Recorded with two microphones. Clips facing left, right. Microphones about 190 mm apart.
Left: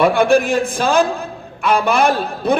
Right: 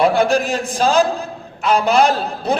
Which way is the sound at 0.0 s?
55° left (ahead or behind).